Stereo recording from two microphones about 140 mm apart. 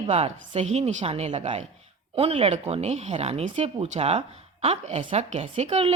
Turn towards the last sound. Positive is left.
turn(degrees=-50)  # may be behind; listen again after turning